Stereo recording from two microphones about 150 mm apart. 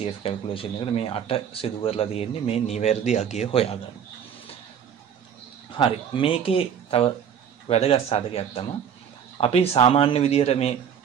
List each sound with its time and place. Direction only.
0.0 s speech: 40° left (ahead or behind)
5.8 s speech: 35° left (ahead or behind)